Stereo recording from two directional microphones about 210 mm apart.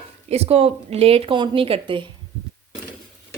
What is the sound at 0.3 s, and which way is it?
Speech, 30° right (ahead or behind).